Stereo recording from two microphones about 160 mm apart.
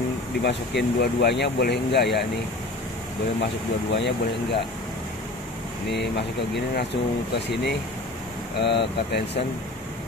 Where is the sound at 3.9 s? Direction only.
90° left.